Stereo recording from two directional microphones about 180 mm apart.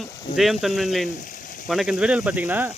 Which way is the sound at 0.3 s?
Centre (ahead or behind).